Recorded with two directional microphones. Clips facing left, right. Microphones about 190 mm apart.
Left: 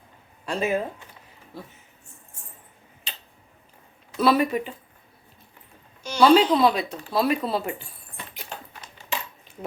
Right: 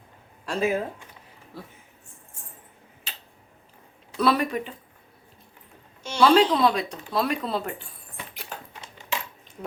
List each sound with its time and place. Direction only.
0.4 s speech: centre (ahead or behind)
3.1 s tick-tock: 5° right (ahead or behind)
4.2 s speech: centre (ahead or behind)
6.1 s speech: centre (ahead or behind)
8.1 s a sound: centre (ahead or behind)
8.8 s a sound: 25° right (ahead or behind)